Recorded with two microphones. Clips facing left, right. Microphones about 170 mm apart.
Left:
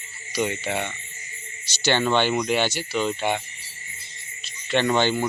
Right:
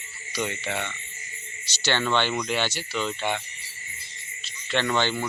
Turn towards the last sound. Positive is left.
turn(degrees=15)  # may be behind; listen again after turning